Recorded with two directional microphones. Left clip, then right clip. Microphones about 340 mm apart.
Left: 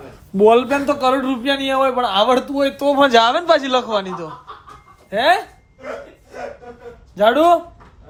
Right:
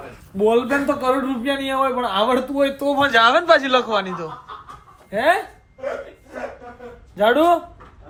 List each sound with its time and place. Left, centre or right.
0.3 s a man's voice: centre
0.7 s a man's voice: centre
2.8 s a man's voice: centre
3.2 s a man's voice: centre
7.2 s a man's voice: centre